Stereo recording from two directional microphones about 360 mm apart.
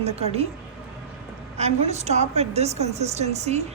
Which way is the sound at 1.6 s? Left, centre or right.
Centre.